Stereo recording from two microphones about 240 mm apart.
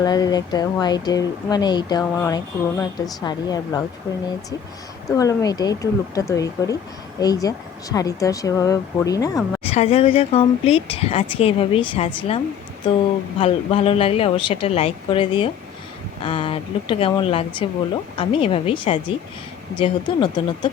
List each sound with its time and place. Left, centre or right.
0.0 s speech: centre
5.0 s a woman's voice: centre
13.4 s a woman's voice: left